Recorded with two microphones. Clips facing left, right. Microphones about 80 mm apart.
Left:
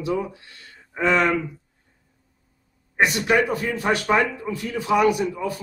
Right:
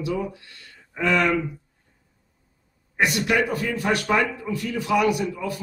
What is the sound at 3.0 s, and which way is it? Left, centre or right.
A man's voice, left.